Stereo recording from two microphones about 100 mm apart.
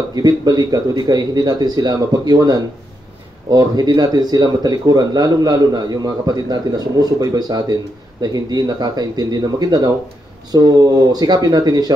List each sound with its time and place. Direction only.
0.1 s speech: 40° right (ahead or behind)